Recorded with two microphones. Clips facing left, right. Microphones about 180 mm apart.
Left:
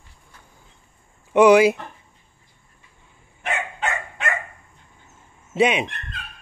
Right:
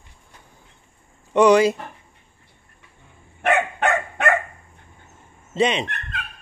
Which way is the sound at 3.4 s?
60° right (ahead or behind).